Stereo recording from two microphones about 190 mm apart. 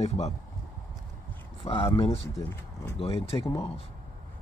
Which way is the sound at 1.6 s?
30° left (ahead or behind).